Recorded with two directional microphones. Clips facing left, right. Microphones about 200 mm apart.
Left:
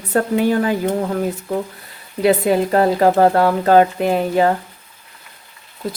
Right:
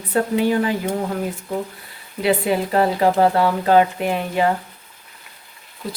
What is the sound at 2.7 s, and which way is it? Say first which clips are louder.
Speech: left 2 dB; 45° left (ahead or behind).